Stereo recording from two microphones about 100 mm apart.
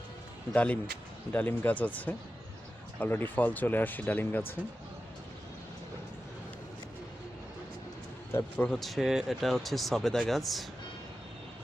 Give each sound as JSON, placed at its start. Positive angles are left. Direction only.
{"t": 0.5, "sound": "speech", "side_deg": 15}
{"t": 8.5, "sound": "speech", "side_deg": 15}
{"t": 8.8, "sound": "speech", "side_deg": 0}